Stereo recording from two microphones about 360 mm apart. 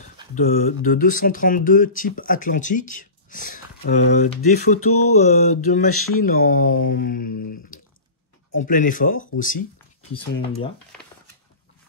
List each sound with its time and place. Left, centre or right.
0.3 s speech: left
4.9 s speech: left
5.2 s speech: left
5.9 s speech: left
6.2 s speech: left
8.5 s speech: left